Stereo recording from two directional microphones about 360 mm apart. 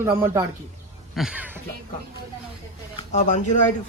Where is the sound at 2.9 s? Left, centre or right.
Centre.